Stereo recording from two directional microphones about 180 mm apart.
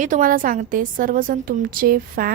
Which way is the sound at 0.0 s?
50° right (ahead or behind).